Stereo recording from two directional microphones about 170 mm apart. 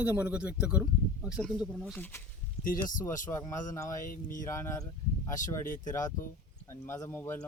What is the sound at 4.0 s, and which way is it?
Speech, 50° left (ahead or behind).